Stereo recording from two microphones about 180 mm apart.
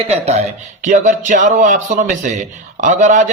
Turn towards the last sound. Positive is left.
turn(degrees=-45)  # may be behind; listen again after turning